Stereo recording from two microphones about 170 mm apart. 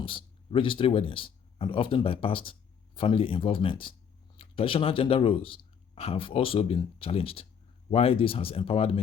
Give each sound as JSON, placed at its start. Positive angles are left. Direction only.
{"t": 0.0, "sound": "speech", "side_deg": 30}